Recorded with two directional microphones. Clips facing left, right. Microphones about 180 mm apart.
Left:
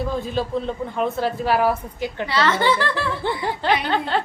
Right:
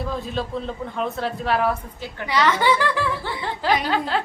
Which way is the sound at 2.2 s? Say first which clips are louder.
Right 1 dB; 15° right (ahead or behind).